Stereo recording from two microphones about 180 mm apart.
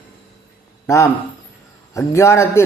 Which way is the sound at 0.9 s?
15° left (ahead or behind).